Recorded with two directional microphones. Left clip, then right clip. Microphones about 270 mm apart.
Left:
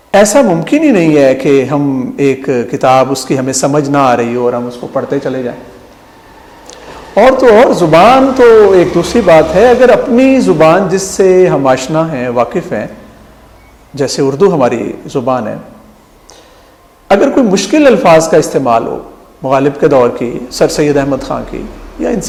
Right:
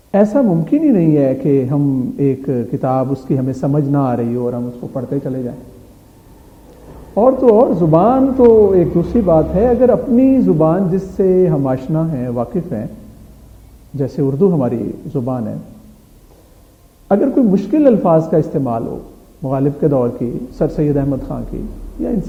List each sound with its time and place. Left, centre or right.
0.1 s a woman's voice: centre
6.7 s a sound: centre
7.2 s a woman's voice: left
14.1 s a woman's voice: centre
17.2 s a woman's voice: centre